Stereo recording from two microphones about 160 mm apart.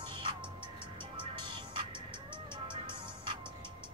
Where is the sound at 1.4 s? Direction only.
30° right (ahead or behind).